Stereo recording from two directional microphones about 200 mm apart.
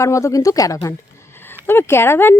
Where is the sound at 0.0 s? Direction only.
15° left (ahead or behind).